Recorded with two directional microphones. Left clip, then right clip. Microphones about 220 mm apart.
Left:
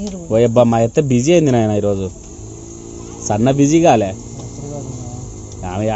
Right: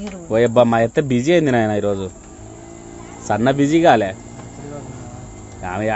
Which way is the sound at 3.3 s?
5° right (ahead or behind).